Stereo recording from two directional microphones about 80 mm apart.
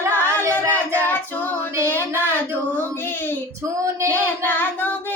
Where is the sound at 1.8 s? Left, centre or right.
Left.